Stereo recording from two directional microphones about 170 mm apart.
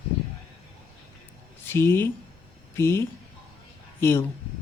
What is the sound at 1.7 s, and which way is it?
Speech, 15° left (ahead or behind).